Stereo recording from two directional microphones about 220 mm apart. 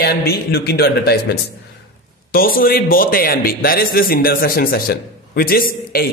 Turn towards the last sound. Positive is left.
turn(degrees=45)  # may be behind; listen again after turning